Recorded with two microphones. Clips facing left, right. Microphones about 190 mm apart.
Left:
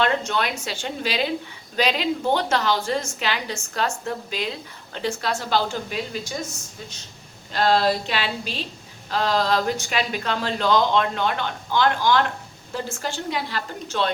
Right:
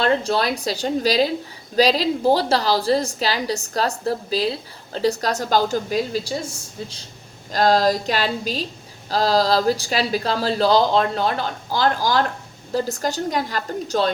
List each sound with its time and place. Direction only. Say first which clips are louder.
0.0 s a woman's voice: right 3 dB; 35° right (ahead or behind)